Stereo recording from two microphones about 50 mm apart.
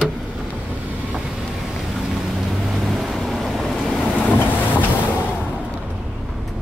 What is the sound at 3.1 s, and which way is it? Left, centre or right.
Vehicle, centre.